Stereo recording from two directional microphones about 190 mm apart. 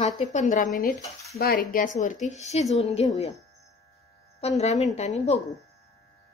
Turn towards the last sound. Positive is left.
turn(degrees=35)  # may be behind; listen again after turning